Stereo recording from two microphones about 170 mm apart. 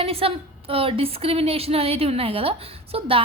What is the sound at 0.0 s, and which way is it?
A woman's voice, 35° right (ahead or behind).